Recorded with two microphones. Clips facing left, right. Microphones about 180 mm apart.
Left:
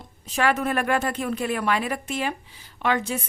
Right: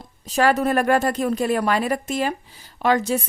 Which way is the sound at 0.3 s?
40° right (ahead or behind).